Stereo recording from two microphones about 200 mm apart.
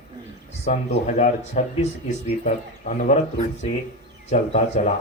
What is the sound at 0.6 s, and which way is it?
Speech, 35° left (ahead or behind).